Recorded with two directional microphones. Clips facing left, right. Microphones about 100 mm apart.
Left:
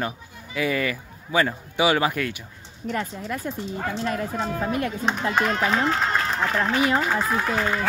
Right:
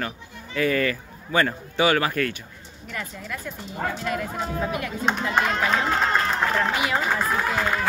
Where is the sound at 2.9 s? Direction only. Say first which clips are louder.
Left 6 dB; 35° left (ahead or behind).